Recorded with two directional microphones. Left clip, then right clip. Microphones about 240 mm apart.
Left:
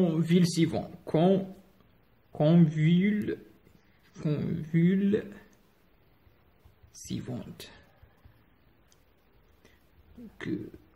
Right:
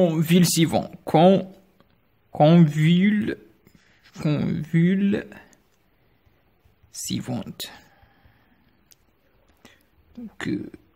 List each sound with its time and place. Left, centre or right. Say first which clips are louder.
0.0 s speech: right 7 dB; right
7.1 s speech: right 8 dB; right